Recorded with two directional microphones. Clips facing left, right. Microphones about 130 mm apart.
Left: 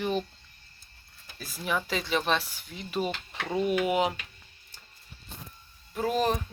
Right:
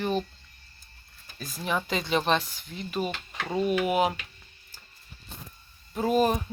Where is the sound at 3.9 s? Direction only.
15° right (ahead or behind).